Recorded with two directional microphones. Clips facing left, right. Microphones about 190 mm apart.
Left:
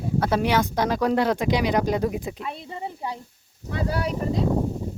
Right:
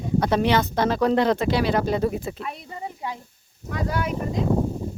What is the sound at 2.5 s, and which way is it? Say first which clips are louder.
Speech: left 1 dB; 30° left (ahead or behind).